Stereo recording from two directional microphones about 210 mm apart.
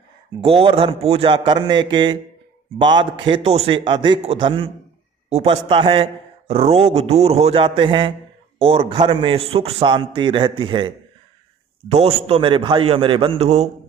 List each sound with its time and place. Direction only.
0.4 s a man's voice: 25° right (ahead or behind)
11.9 s a man's voice: 30° right (ahead or behind)